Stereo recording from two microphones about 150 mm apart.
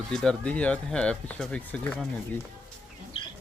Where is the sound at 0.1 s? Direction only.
5° left (ahead or behind).